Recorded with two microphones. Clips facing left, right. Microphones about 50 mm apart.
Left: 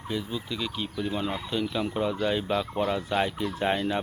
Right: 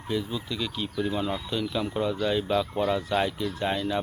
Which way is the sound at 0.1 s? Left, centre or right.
Centre.